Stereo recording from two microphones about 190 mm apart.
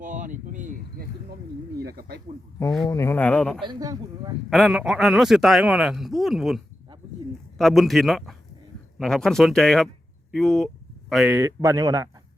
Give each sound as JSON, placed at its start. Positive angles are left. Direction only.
{"t": 0.0, "sound": "speech", "side_deg": -45}
{"t": 1.8, "sound": "speech", "side_deg": -55}
{"t": 2.8, "sound": "speech", "side_deg": 15}
{"t": 3.6, "sound": "speech", "side_deg": -20}
{"t": 4.4, "sound": "a man's voice", "side_deg": 0}
{"t": 7.6, "sound": "a man's voice", "side_deg": 0}